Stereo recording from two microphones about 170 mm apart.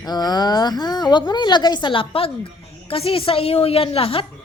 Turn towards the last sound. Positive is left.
turn(degrees=35)  # may be behind; listen again after turning